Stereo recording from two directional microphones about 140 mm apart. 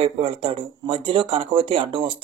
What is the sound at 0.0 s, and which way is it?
Speech, 40° right (ahead or behind).